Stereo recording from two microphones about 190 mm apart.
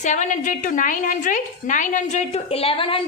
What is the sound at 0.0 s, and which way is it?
A woman's voice, 40° left (ahead or behind).